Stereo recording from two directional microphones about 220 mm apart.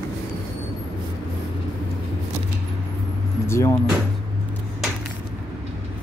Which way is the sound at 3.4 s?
15° left (ahead or behind).